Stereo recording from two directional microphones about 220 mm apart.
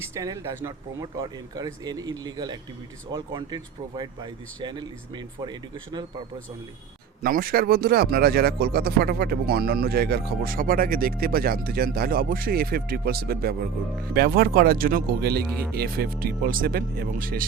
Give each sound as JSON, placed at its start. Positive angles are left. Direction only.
{"t": 0.0, "sound": "speech", "side_deg": -15}
{"t": 7.2, "sound": "speech", "side_deg": -40}